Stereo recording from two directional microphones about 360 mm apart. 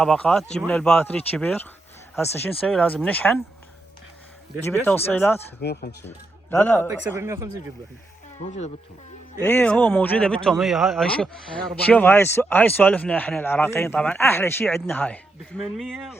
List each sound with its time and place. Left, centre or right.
0.0 s a man's voice: centre
4.6 s a man's voice: centre
5.5 s speech: left
6.5 s a man's voice: centre
6.8 s speech: centre
8.4 s speech: centre
9.4 s a man's voice: centre